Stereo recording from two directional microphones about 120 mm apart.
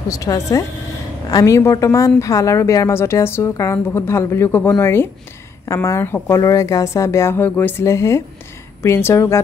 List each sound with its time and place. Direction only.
0.1 s a woman's voice: 30° left (ahead or behind)